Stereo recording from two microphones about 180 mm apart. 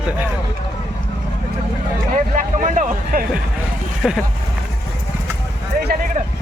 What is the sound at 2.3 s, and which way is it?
Speech, 45° right (ahead or behind).